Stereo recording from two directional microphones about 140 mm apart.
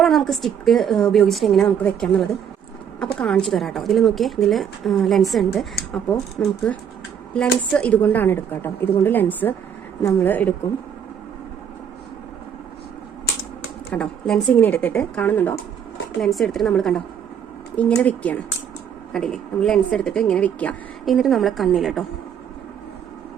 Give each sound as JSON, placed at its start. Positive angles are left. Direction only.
{"t": 0.0, "sound": "a woman's voice", "side_deg": 0}
{"t": 6.4, "sound": "speech", "side_deg": 15}
{"t": 13.9, "sound": "speech", "side_deg": 5}
{"t": 16.2, "sound": "a woman's voice", "side_deg": 0}
{"t": 21.0, "sound": "a woman's voice", "side_deg": 0}